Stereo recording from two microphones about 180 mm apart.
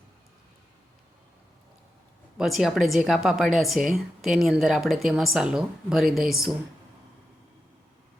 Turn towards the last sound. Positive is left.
turn(degrees=0)  # may be behind; listen again after turning